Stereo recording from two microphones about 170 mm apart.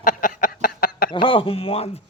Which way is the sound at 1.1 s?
30° left (ahead or behind).